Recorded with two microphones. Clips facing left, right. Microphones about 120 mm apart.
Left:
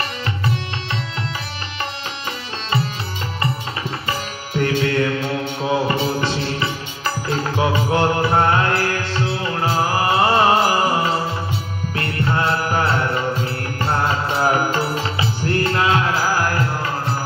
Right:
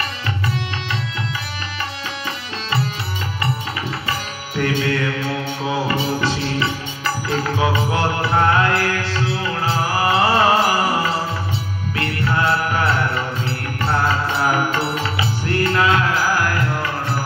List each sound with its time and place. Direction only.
4.6 s music: 35° left (ahead or behind)
7.9 s music: 30° left (ahead or behind)
11.9 s mantra: 30° left (ahead or behind)
14.0 s mantra: 35° left (ahead or behind)
15.4 s music: 35° left (ahead or behind)